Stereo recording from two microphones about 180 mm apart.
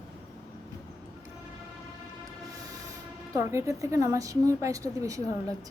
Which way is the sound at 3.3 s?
15° right (ahead or behind).